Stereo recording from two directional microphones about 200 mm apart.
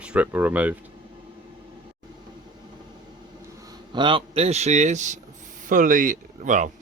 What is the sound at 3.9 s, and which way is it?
Speech, 25° right (ahead or behind).